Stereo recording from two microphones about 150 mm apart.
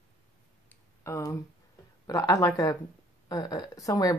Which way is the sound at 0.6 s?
20° left (ahead or behind).